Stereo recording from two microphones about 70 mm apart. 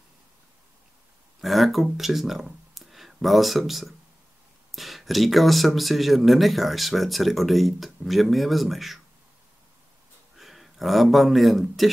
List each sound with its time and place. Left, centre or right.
1.4 s speech: centre
10.3 s speech: centre